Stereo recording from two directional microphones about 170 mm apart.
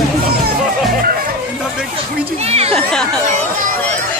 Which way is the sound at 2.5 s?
35° right (ahead or behind).